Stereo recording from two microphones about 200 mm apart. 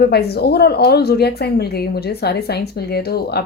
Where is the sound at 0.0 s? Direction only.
55° left (ahead or behind).